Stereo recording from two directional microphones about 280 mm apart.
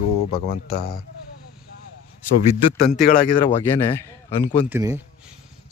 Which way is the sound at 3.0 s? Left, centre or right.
Left.